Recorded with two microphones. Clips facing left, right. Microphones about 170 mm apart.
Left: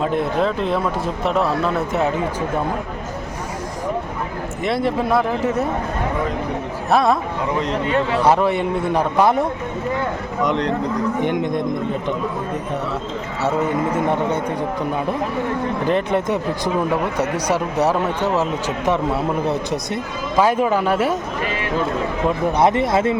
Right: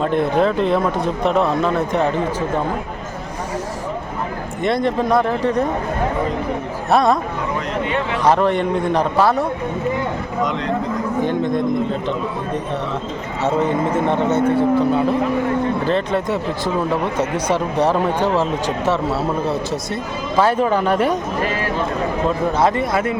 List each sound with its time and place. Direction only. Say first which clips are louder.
0.0 s speech: right 3 dB; centre (ahead or behind)
4.6 s speech: right 2 dB; 5° left (ahead or behind)
6.9 s speech: right 1 dB; centre (ahead or behind)
7.9 s speech: left 2 dB; 40° left (ahead or behind)
8.2 s a man's voice: right 3 dB; 10° left (ahead or behind)
14.1 s a man's voice: right 4 dB; 10° left (ahead or behind)
15.9 s a man's voice: even; 15° left (ahead or behind)
22.5 s a man's voice: left 1 dB; 20° left (ahead or behind)